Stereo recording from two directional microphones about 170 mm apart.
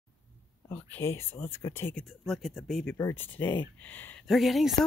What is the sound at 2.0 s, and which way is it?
Speech, centre (ahead or behind).